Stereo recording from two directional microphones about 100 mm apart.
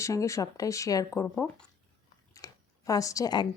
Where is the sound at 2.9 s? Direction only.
35° left (ahead or behind).